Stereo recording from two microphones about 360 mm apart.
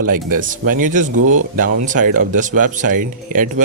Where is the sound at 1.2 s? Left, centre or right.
Right.